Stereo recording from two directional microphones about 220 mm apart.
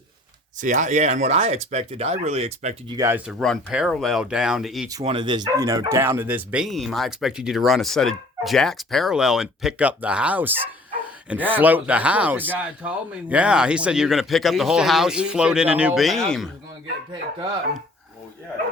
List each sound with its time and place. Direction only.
0.6 s speech: 35° right (ahead or behind)
2.9 s speech: 15° right (ahead or behind)
4.9 s speech: 20° right (ahead or behind); by 16.5 s centre (ahead or behind)